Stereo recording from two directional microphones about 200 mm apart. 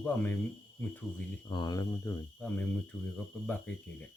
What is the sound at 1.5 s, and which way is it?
Speech, 20° left (ahead or behind).